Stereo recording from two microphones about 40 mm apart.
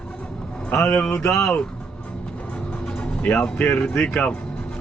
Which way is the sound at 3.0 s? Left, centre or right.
Left.